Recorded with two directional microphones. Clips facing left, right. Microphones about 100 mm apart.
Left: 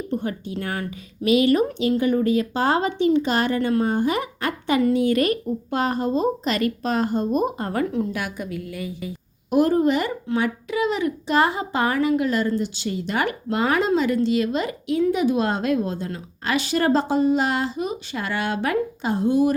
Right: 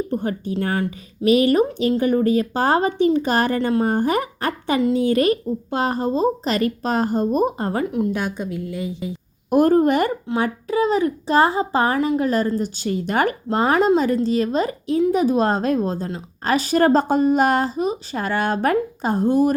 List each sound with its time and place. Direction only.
0.1 s speech: 40° right (ahead or behind)
7.7 s a woman's voice: 20° right (ahead or behind)
9.5 s a woman's voice: 50° right (ahead or behind)
10.2 s a woman's voice: 35° right (ahead or behind)